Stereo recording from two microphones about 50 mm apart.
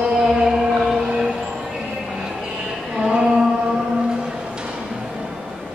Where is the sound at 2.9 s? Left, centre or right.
Centre.